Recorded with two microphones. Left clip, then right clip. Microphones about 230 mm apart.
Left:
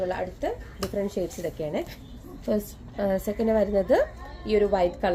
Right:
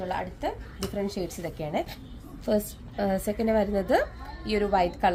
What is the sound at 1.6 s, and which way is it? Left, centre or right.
A woman's voice, right.